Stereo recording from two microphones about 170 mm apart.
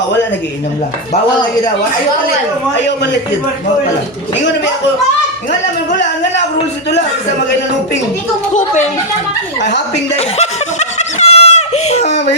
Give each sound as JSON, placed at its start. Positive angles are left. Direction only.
{"t": 2.8, "sound": "speech", "side_deg": 90}
{"t": 9.6, "sound": "speech", "side_deg": 90}
{"t": 10.2, "sound": "a sound", "side_deg": 40}